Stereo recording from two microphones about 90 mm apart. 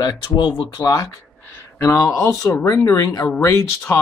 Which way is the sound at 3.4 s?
30° left (ahead or behind).